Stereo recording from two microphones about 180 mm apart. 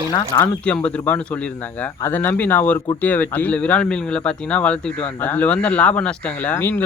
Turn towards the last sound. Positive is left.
turn(degrees=10)  # may be behind; listen again after turning